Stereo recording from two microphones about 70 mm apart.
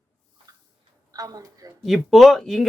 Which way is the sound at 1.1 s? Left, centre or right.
Right.